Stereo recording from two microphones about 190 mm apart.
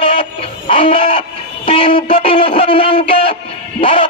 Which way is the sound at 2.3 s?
30° left (ahead or behind).